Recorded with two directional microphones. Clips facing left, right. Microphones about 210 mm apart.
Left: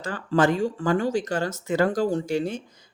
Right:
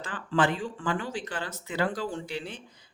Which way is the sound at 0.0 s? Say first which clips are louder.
Left 5 dB; 40° left (ahead or behind).